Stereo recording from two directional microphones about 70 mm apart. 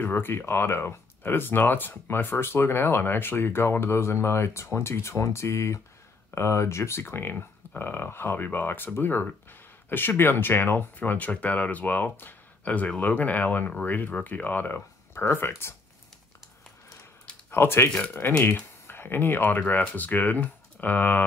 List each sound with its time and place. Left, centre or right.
0.0 s speech: left
17.5 s speech: left
17.9 s speech: centre
18.4 s speech: left